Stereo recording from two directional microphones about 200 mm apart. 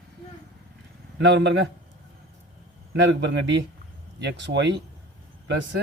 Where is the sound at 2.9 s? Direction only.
60° right (ahead or behind).